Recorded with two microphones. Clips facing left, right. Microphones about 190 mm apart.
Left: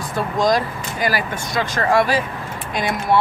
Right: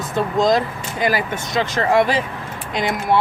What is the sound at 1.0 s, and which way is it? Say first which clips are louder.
Speech: right 2 dB; 20° right (ahead or behind).